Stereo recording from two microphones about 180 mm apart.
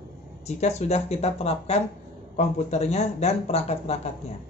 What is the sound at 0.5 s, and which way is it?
Speech, 40° left (ahead or behind).